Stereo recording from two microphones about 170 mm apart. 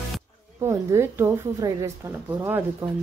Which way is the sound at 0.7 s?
15° right (ahead or behind).